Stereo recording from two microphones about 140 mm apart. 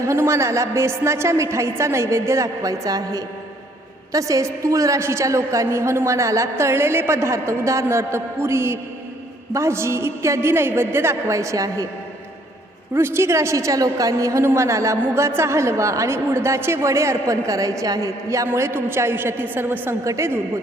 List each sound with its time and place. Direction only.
0.0 s a woman's voice: 20° right (ahead or behind)
12.9 s a woman's voice: 15° right (ahead or behind)